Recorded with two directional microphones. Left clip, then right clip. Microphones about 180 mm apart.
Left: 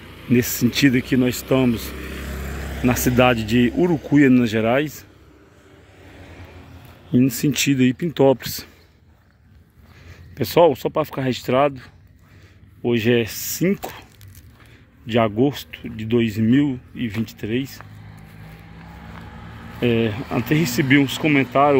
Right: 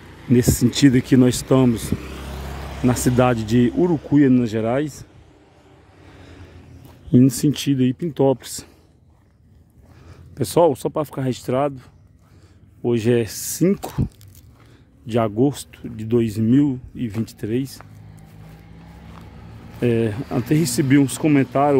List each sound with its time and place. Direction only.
0.0 s speech: 25° right (ahead or behind)
2.0 s vehicle: 30° left (ahead or behind)
2.8 s speech: 25° right (ahead or behind)
7.1 s speech: 35° right (ahead or behind)
7.6 s speech: 15° right (ahead or behind)
10.3 s speech: 30° right (ahead or behind)
12.8 s speech: 30° right (ahead or behind)
15.0 s speech: 25° right (ahead or behind)
19.8 s speech: 30° right (ahead or behind)